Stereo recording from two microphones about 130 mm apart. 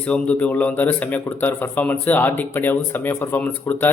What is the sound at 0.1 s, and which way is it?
Speech, 10° left (ahead or behind).